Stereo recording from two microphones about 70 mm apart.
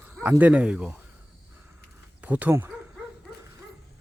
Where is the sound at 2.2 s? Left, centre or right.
Right.